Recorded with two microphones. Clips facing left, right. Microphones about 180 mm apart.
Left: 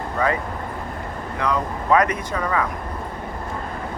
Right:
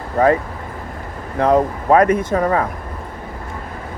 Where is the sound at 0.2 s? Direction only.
45° right (ahead or behind).